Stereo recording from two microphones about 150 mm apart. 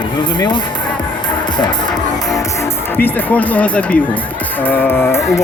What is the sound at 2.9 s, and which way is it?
Speech, 10° left (ahead or behind).